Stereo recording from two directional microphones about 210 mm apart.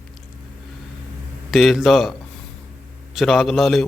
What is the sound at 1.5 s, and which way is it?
A man's voice, centre (ahead or behind).